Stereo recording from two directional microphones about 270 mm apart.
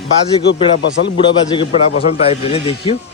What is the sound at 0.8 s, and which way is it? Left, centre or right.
Speech, left.